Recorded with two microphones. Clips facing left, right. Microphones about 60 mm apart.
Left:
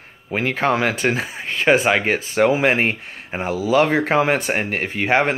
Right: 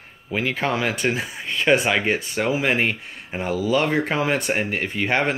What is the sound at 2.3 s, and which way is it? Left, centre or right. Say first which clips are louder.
Speech: left 7 dB; left.